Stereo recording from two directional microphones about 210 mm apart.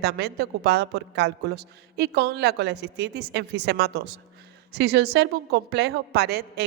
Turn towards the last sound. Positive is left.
turn(degrees=-50)  # may be behind; listen again after turning